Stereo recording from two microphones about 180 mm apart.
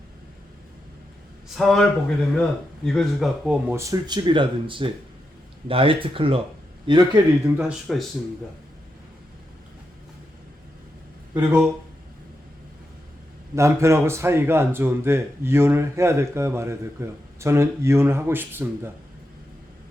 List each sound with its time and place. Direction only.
1.5 s a man's voice: centre (ahead or behind)
3.8 s speech: 20° right (ahead or behind)
7.4 s a man's voice: 5° right (ahead or behind)
11.3 s speech: 10° right (ahead or behind)
13.6 s speech: 15° right (ahead or behind)